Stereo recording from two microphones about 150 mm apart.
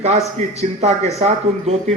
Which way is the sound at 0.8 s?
45° right (ahead or behind).